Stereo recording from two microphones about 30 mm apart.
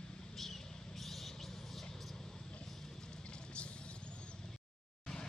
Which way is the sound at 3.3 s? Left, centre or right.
Left.